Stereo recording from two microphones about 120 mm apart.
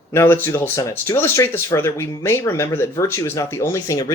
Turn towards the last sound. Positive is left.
turn(degrees=25)  # may be behind; listen again after turning